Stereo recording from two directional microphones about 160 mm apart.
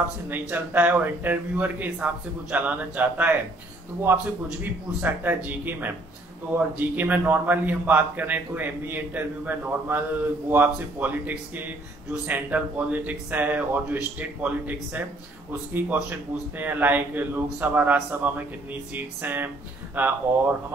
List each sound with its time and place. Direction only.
0.3 s a man's voice: 10° right (ahead or behind)
16.5 s a man's voice: 10° right (ahead or behind)